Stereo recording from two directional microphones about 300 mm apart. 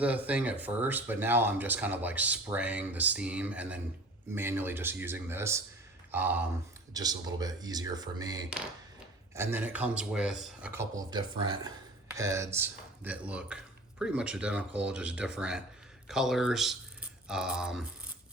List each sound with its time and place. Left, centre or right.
0.3 s speech: centre